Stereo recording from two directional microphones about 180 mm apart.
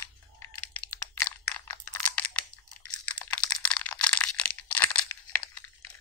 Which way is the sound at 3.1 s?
5° left (ahead or behind).